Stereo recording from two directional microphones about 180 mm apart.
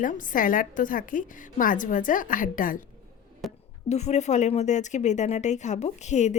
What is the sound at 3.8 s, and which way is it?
Speech, 40° left (ahead or behind).